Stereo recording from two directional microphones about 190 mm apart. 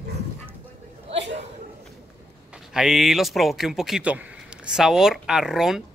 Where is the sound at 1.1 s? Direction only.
70° right (ahead or behind).